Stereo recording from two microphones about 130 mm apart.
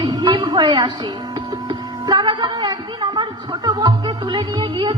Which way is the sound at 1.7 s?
35° right (ahead or behind).